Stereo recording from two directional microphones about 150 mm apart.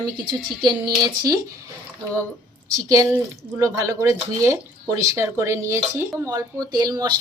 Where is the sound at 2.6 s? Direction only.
20° right (ahead or behind).